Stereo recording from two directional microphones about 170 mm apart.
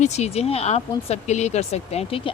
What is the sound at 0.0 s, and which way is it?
Speech, 40° left (ahead or behind).